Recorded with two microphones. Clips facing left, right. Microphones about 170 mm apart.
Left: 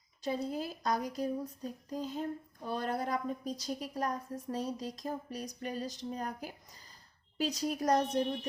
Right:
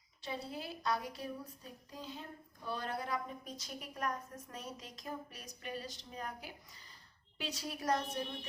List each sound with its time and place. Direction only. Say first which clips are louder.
0.2 s a woman's voice: left 8 dB; 40° left (ahead or behind)